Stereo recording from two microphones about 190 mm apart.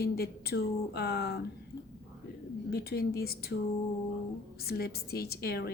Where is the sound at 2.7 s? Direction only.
55° left (ahead or behind).